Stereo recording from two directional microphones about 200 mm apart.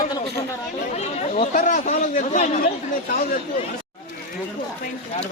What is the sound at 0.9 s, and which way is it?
Speech, 35° left (ahead or behind).